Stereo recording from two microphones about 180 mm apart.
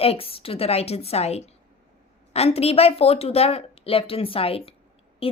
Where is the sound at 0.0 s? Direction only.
35° left (ahead or behind).